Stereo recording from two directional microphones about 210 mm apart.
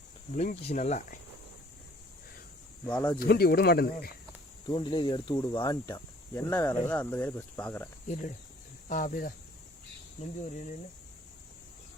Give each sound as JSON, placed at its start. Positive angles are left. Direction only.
{"t": 0.3, "sound": "speech", "side_deg": 35}
{"t": 3.2, "sound": "speech", "side_deg": 45}
{"t": 4.6, "sound": "speech", "side_deg": 20}
{"t": 8.0, "sound": "speech", "side_deg": 35}
{"t": 10.4, "sound": "speech", "side_deg": 35}